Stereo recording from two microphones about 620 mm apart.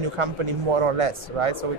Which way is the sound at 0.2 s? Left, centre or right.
Right.